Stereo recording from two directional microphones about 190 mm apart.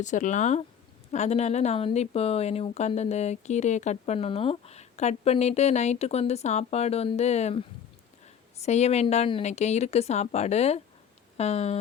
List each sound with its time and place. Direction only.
0.0 s speech: 40° left (ahead or behind)